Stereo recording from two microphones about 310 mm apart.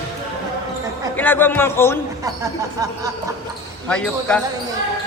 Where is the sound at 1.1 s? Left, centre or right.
Centre.